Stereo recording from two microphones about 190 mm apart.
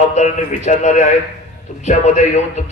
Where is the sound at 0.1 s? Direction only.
35° left (ahead or behind).